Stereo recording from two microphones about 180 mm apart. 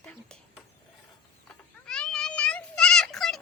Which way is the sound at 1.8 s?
5° left (ahead or behind).